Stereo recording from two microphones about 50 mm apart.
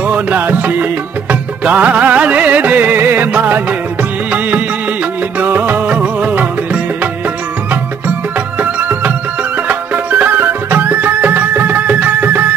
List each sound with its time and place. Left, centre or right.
0.0 s music: right
5.9 s music: right
8.5 s music: right